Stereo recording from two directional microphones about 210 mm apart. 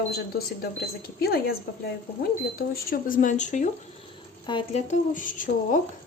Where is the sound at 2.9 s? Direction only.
40° left (ahead or behind).